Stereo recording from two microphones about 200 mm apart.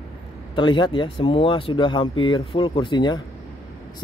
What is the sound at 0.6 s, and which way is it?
Speech, 25° left (ahead or behind).